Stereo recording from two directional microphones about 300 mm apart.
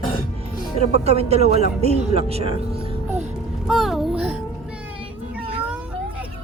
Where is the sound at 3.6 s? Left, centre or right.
Centre.